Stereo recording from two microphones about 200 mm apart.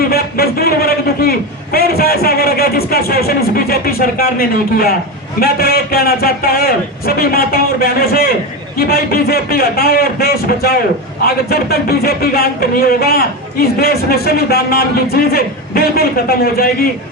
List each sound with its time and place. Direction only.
0.1 s a man's voice: 50° left (ahead or behind)